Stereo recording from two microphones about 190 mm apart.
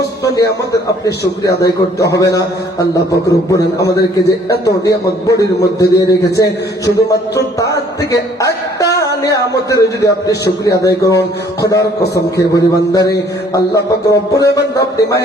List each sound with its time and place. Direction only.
0.3 s a man's voice: 20° left (ahead or behind)
4.9 s a man's voice: 15° left (ahead or behind)